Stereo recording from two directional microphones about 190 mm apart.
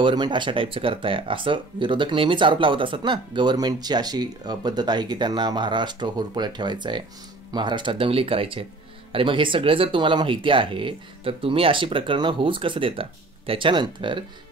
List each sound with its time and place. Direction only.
0.0 s speech: 25° right (ahead or behind)